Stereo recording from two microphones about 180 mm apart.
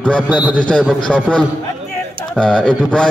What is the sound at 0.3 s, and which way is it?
Speech, 10° right (ahead or behind).